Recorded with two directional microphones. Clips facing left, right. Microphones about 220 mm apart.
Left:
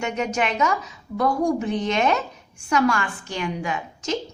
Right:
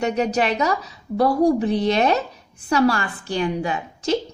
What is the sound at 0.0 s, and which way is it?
A woman's voice, 35° right (ahead or behind).